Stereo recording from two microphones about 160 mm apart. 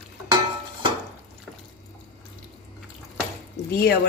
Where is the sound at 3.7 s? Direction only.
90° left.